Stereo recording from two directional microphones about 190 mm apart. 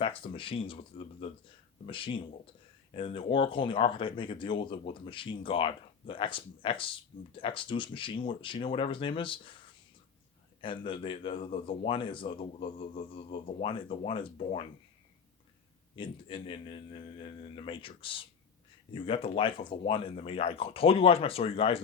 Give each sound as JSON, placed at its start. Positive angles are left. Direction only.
{"t": 0.0, "sound": "speech", "side_deg": 30}
{"t": 10.6, "sound": "speech", "side_deg": 25}
{"t": 16.0, "sound": "speech", "side_deg": 25}